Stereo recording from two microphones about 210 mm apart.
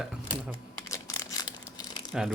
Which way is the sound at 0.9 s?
15° left (ahead or behind).